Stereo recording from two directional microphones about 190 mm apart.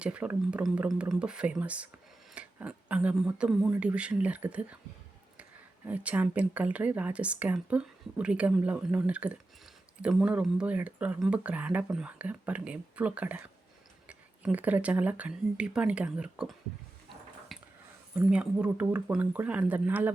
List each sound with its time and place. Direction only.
0.0 s speech: 5° right (ahead or behind)
17.5 s a sound: centre (ahead or behind)
18.3 s speech: 5° right (ahead or behind)